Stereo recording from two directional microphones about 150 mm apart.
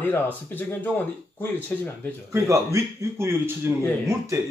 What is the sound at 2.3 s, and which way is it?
A man's voice, 20° right (ahead or behind).